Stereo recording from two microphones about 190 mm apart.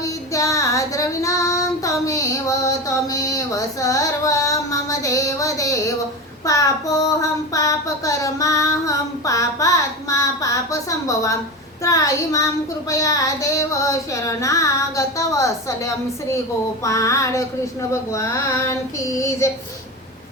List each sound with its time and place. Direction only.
0.0 s child singing: 15° left (ahead or behind)